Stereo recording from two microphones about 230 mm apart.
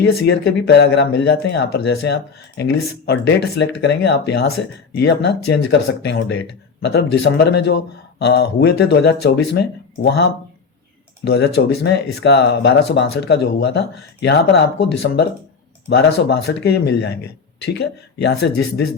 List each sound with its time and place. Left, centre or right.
0.0 s speech: left
11.3 s speech: left